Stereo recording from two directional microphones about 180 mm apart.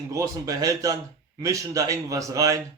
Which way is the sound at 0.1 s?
20° right (ahead or behind).